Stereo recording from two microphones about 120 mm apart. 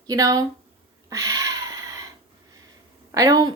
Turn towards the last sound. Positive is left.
turn(degrees=-30)  # may be behind; listen again after turning